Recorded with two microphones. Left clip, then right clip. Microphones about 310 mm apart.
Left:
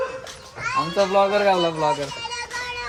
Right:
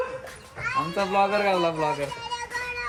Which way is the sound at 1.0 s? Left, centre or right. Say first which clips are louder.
Left 5 dB; centre.